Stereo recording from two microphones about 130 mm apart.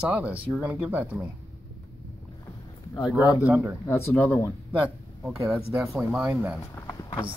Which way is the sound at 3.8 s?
20° left (ahead or behind).